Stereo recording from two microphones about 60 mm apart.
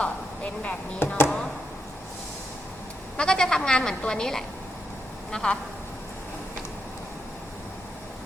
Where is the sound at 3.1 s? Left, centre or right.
Centre.